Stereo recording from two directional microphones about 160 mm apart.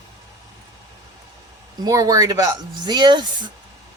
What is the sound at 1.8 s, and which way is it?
A man's voice, 20° right (ahead or behind).